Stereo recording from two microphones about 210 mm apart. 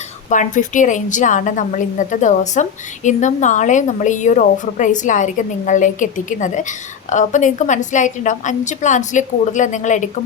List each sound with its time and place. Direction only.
0.3 s a woman's voice: 35° left (ahead or behind)